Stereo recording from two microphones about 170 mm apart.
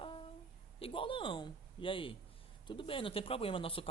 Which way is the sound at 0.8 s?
30° left (ahead or behind).